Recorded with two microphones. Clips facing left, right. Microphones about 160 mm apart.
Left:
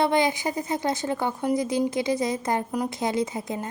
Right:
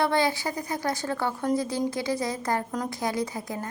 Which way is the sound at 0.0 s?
20° left (ahead or behind).